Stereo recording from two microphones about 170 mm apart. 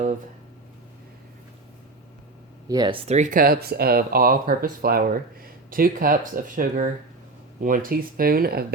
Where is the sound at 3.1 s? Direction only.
45° right (ahead or behind).